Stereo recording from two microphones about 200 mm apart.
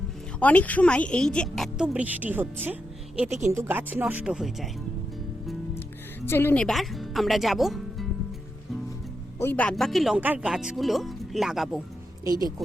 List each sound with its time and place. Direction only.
0.3 s speech: 5° left (ahead or behind)
6.2 s speech: 10° left (ahead or behind)
9.4 s speech: 10° left (ahead or behind)
12.2 s speech: 20° right (ahead or behind)